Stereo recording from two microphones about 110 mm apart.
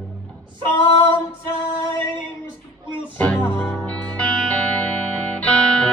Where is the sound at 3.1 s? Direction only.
15° left (ahead or behind).